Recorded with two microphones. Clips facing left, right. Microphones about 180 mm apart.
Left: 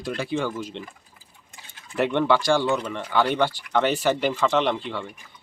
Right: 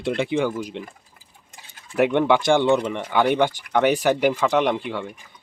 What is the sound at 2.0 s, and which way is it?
Speech, 15° right (ahead or behind).